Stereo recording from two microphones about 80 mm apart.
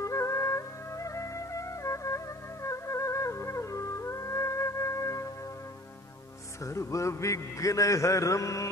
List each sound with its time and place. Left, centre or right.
0.0 s music: left
6.6 s a man's voice: left